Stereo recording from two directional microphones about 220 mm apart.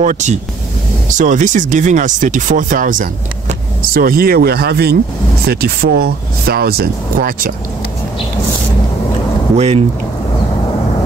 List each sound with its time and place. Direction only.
0.0 s speech: 35° right (ahead or behind)
9.6 s speech: 30° right (ahead or behind)